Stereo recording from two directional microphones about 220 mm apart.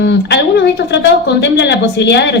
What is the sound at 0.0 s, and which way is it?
Speech, 50° left (ahead or behind).